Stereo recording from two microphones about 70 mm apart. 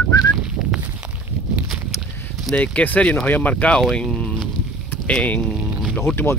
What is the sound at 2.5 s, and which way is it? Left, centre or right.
Speech, centre.